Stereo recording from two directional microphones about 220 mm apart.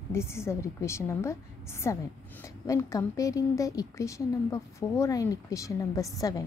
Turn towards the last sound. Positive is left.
turn(degrees=15)  # may be behind; listen again after turning